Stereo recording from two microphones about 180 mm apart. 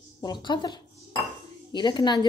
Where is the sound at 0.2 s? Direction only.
25° left (ahead or behind).